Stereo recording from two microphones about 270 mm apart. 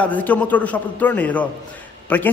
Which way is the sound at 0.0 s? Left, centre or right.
Centre.